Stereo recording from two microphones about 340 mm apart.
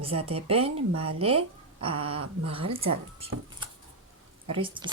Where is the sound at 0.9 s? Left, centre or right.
Right.